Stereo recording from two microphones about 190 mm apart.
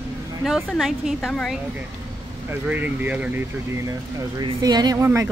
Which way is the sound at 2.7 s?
10° right (ahead or behind).